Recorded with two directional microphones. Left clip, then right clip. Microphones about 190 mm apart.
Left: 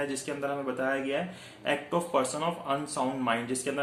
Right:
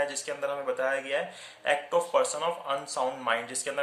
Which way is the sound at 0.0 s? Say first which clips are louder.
Right 2 dB; 15° right (ahead or behind).